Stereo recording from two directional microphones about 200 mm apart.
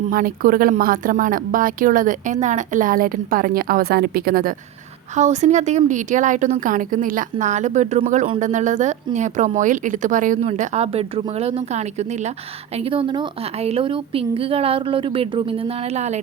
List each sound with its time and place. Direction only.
0.1 s speech: 45° right (ahead or behind)
5.1 s a woman's voice: 35° right (ahead or behind)